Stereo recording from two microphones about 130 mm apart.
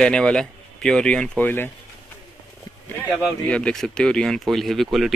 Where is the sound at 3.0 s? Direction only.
10° left (ahead or behind).